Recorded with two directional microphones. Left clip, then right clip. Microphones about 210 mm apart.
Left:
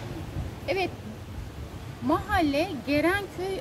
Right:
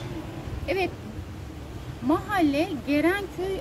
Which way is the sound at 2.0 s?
15° left (ahead or behind).